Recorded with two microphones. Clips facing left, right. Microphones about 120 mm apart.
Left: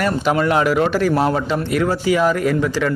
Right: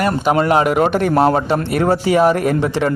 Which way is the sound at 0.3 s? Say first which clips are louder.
Right 4 dB; 35° right (ahead or behind).